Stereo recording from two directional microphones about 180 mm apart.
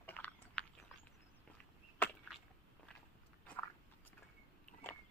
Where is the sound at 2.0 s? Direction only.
10° left (ahead or behind).